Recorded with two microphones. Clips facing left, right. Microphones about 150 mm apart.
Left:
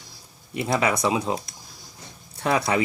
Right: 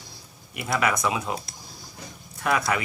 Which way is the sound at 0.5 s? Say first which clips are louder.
Left 2 dB; 30° left (ahead or behind).